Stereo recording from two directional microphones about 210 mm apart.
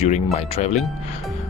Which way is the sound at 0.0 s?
30° left (ahead or behind).